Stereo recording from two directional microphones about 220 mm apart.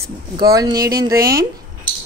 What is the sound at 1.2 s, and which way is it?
Speech, 45° right (ahead or behind).